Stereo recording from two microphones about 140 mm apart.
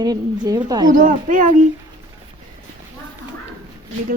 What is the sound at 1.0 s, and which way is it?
Speech, 70° right (ahead or behind).